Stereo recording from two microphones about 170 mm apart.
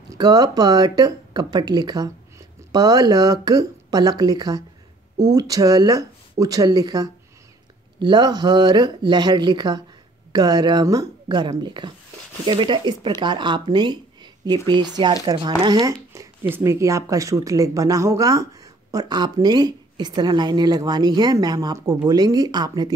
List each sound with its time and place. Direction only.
0.1 s speech: 20° right (ahead or behind)